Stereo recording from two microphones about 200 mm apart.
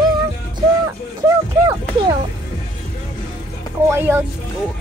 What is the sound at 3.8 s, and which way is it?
Speech, 10° right (ahead or behind).